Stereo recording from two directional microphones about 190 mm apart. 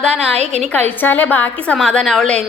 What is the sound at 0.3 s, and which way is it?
Speech, 35° right (ahead or behind).